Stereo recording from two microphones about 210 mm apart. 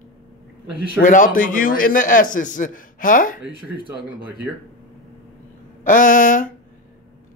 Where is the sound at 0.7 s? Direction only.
40° left (ahead or behind).